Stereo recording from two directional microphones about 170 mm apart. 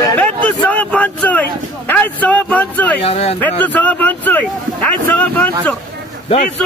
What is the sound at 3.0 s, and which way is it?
Speech, 35° left (ahead or behind).